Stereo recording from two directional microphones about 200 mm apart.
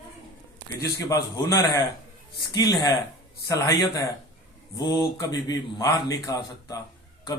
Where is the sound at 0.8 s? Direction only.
15° left (ahead or behind).